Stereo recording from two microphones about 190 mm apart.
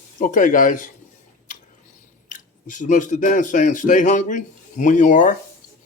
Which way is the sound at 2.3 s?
40° left (ahead or behind).